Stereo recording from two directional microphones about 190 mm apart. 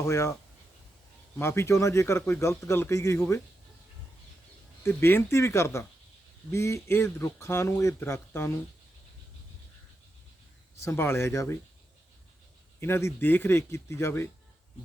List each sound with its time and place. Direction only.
0.0 s speech: 15° left (ahead or behind)
1.4 s speech: 15° left (ahead or behind)
4.8 s speech: 10° left (ahead or behind)
10.8 s speech: 15° left (ahead or behind)
12.8 s speech: 15° left (ahead or behind)